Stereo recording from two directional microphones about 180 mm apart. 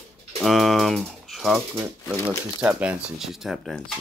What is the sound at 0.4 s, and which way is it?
Speech, centre (ahead or behind).